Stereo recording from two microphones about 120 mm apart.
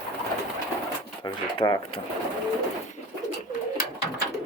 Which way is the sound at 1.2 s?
35° left (ahead or behind).